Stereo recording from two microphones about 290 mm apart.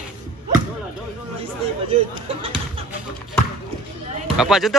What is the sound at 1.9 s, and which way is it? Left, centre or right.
Speech, centre.